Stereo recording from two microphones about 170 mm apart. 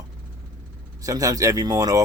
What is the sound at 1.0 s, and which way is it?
Speech, 20° right (ahead or behind).